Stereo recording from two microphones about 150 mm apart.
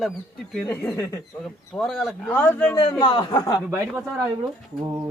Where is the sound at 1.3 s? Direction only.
Centre (ahead or behind).